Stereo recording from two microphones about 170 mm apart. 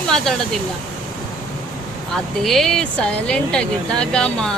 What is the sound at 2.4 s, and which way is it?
Speech, centre (ahead or behind).